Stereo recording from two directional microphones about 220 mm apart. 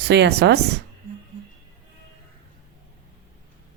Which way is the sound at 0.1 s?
50° right (ahead or behind).